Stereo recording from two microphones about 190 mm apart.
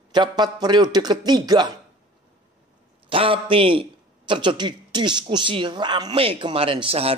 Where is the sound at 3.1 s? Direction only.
30° right (ahead or behind).